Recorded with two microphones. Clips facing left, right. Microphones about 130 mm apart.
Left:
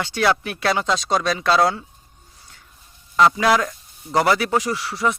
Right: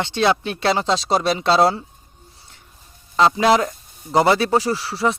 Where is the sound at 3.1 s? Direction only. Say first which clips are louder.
Right 1 dB; 25° right (ahead or behind).